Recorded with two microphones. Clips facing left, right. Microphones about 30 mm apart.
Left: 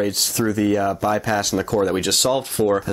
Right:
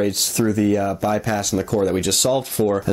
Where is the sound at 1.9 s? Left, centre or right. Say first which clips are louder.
Even; left.